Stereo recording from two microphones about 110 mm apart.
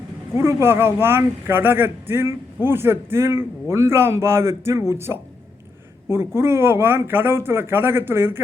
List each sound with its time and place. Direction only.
0.3 s a man's voice: 25° right (ahead or behind)